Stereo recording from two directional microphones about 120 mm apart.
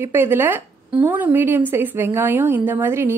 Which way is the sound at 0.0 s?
20° right (ahead or behind).